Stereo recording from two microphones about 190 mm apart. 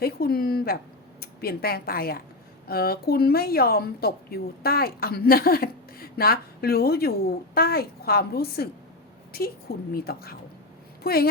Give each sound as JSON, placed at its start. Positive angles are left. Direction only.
{"t": 0.0, "sound": "a woman's voice", "side_deg": 55}